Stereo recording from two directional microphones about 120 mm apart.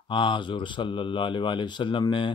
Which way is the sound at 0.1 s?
40° left (ahead or behind).